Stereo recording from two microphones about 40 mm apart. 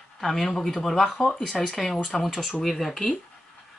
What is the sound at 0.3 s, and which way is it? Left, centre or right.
Speech, centre.